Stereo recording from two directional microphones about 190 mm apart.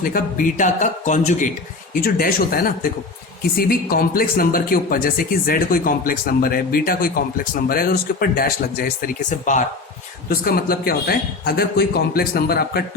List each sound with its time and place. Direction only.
0.0 s speech: 45° left (ahead or behind)
1.9 s speech: 50° left (ahead or behind)
10.2 s speech: 50° left (ahead or behind)